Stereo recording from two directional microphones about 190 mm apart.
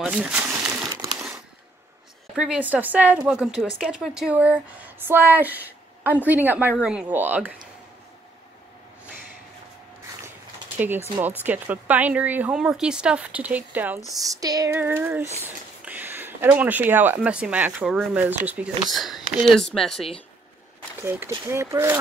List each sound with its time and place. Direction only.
0.0 s crumpling: 5° right (ahead or behind)
2.3 s speech: 5° right (ahead or behind)
11.4 s speech: 10° right (ahead or behind)
21.0 s speech: 10° right (ahead or behind)